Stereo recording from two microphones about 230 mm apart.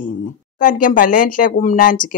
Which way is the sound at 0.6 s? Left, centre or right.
Left.